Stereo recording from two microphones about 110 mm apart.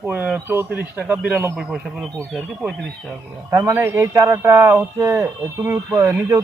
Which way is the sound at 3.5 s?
25° right (ahead or behind).